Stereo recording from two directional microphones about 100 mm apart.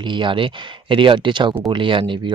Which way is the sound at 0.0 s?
55° right (ahead or behind).